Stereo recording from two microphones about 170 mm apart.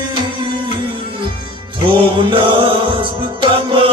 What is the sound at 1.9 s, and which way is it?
Music, 30° right (ahead or behind).